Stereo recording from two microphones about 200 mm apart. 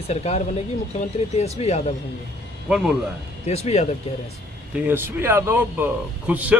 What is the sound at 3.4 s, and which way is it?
Speech, 35° left (ahead or behind).